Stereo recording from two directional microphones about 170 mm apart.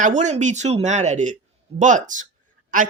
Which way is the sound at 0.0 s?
45° right (ahead or behind).